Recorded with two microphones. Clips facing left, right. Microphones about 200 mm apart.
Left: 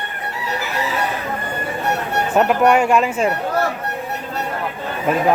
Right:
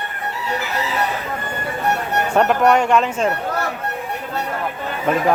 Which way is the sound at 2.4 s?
5° left (ahead or behind).